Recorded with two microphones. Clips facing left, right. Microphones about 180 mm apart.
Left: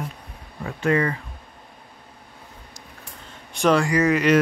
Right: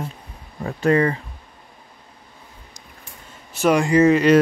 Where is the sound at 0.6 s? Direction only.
35° right (ahead or behind).